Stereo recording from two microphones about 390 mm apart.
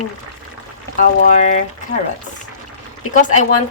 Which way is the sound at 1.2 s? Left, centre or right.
Centre.